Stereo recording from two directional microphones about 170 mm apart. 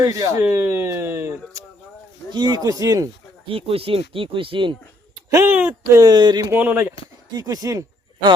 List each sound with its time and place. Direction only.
0.0 s speech: 20° right (ahead or behind)
3.4 s speech: 35° right (ahead or behind)
5.3 s speech: 15° right (ahead or behind)
6.5 s speech: 10° right (ahead or behind)